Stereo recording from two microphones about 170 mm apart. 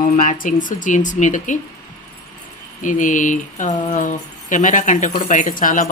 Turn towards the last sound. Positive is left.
turn(degrees=50)  # may be behind; listen again after turning